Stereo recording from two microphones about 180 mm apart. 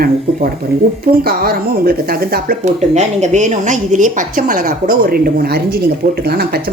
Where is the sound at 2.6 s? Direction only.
40° right (ahead or behind).